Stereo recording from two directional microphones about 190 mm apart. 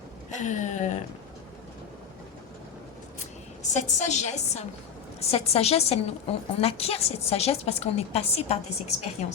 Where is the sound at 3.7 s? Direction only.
35° left (ahead or behind).